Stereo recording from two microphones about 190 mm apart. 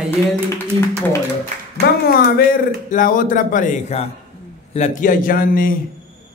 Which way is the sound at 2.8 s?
45° left (ahead or behind).